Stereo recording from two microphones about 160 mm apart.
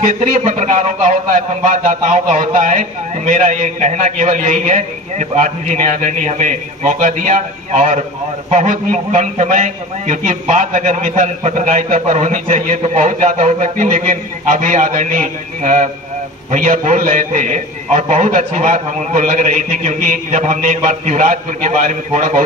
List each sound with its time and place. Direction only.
0.0 s a man's voice: 45° right (ahead or behind)